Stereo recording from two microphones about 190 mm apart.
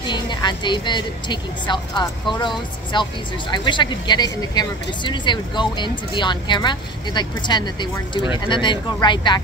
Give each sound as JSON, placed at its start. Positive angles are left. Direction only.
{"t": 0.0, "sound": "speech", "side_deg": 25}